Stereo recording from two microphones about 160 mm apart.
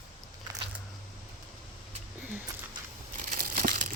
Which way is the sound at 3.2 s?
55° right (ahead or behind).